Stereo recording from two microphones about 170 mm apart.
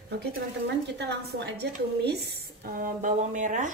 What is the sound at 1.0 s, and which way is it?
A woman's voice, 80° right.